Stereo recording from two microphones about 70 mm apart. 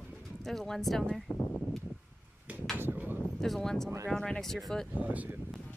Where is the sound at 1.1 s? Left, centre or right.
Centre.